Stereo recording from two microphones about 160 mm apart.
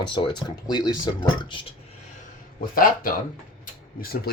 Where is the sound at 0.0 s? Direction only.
30° left (ahead or behind).